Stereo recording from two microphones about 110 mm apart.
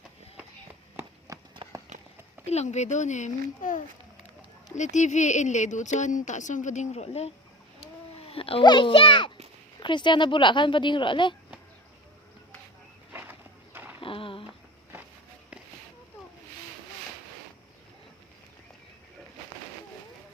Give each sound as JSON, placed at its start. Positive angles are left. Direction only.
{"t": 1.3, "sound": "horse", "side_deg": -30}
{"t": 1.9, "sound": "horse", "side_deg": -90}
{"t": 2.5, "sound": "speech", "side_deg": 85}
{"t": 4.7, "sound": "speech", "side_deg": 90}
{"t": 7.8, "sound": "a sound", "side_deg": 60}
{"t": 8.6, "sound": "a woman's voice", "side_deg": 45}
{"t": 14.0, "sound": "a sound", "side_deg": 55}